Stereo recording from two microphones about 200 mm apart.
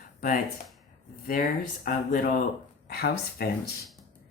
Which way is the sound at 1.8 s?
45° left (ahead or behind).